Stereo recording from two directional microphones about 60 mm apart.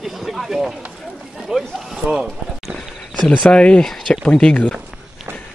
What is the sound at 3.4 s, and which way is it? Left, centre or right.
Speech, centre.